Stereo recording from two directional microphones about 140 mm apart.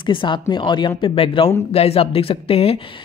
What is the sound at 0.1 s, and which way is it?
Speech, 35° left (ahead or behind).